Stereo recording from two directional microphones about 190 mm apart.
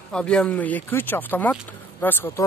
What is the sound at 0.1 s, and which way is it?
Speech, 5° left (ahead or behind).